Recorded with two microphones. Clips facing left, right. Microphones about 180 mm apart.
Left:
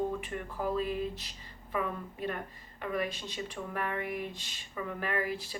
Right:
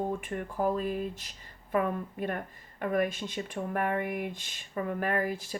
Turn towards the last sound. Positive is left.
turn(degrees=-50)  # may be behind; listen again after turning